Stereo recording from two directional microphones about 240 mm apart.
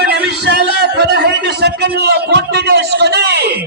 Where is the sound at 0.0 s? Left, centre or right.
Right.